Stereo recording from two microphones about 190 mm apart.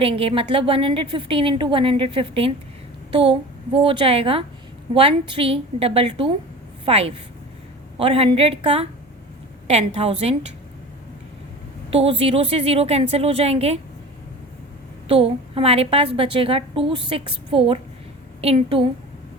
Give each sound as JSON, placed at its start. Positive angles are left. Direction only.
{"t": 0.0, "sound": "a woman's voice", "side_deg": -30}
{"t": 11.9, "sound": "a woman's voice", "side_deg": -30}
{"t": 15.0, "sound": "a woman's voice", "side_deg": -30}